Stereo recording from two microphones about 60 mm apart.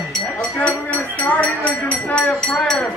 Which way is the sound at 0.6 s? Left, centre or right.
Left.